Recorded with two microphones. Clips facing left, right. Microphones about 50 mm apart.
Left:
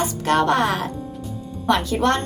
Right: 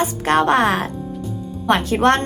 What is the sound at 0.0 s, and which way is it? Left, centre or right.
A woman's voice, right.